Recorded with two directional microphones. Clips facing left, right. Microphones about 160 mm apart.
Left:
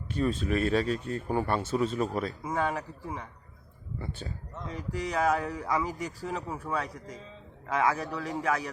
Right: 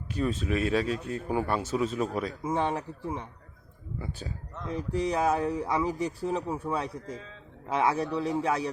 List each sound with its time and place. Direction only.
0.2 s speech: 5° right (ahead or behind)
2.4 s speech: 25° right (ahead or behind)
3.9 s speech: 10° right (ahead or behind)
4.7 s speech: 25° right (ahead or behind)